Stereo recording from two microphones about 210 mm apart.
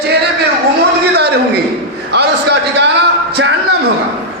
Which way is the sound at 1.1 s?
50° right (ahead or behind).